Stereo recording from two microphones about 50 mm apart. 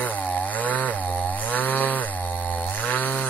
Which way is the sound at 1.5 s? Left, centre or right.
Left.